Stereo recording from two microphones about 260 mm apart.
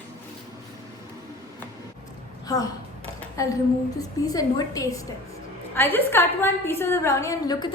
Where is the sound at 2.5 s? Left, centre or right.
Centre.